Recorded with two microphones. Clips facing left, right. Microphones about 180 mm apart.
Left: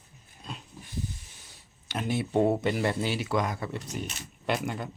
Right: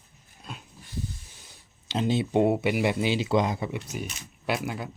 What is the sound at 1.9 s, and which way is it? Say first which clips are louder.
Speech: right 3 dB; 20° right (ahead or behind).